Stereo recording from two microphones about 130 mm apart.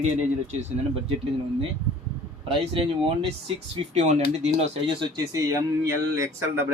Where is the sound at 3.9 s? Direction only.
55° right (ahead or behind).